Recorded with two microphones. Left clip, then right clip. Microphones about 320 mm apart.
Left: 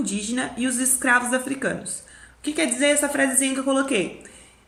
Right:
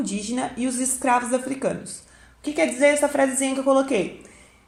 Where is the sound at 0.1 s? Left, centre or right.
Centre.